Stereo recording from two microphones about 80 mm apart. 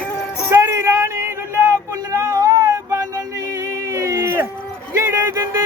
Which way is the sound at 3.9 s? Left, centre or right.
Right.